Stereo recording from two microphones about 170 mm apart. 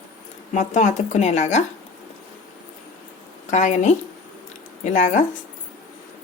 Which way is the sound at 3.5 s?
45° left (ahead or behind).